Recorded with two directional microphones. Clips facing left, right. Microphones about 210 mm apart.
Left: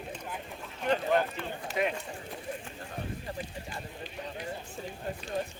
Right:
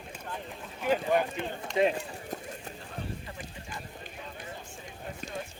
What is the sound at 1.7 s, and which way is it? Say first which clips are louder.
Run: right 5 dB; 5° left (ahead or behind).